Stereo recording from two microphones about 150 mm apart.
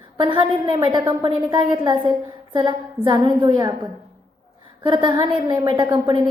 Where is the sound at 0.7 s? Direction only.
30° right (ahead or behind).